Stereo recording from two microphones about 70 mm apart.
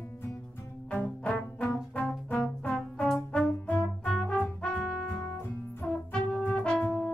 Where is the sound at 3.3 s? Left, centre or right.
Centre.